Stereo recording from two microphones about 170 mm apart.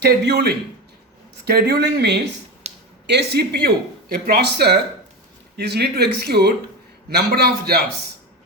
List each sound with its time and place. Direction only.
0.0 s speech: 70° right (ahead or behind)
2.6 s a sound: 40° right (ahead or behind)
3.1 s speech: 75° right (ahead or behind)